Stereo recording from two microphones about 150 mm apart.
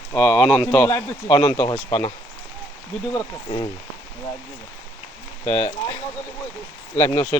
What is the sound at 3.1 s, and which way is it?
Speech, 25° left (ahead or behind).